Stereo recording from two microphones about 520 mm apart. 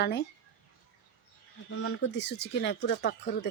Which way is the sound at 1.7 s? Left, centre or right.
Left.